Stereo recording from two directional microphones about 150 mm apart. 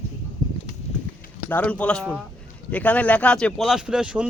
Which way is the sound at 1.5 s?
10° left (ahead or behind).